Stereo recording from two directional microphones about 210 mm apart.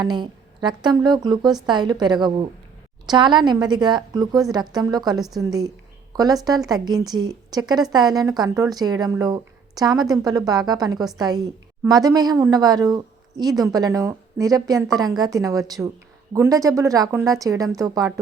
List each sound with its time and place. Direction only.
0.0 s a woman's voice: 20° right (ahead or behind)